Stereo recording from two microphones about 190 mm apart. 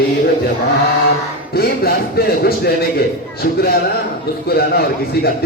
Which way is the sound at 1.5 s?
55° left (ahead or behind).